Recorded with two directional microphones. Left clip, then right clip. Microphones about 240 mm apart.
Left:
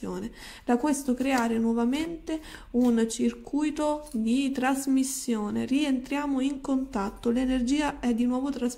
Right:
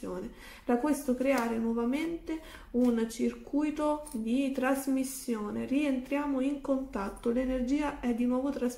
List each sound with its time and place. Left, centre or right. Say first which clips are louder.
0.7 s speech: left 3 dB; left